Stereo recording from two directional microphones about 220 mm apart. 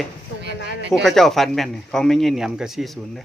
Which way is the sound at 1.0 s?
Centre (ahead or behind).